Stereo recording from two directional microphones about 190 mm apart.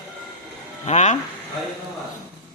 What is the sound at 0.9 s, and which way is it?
Speech, 40° left (ahead or behind).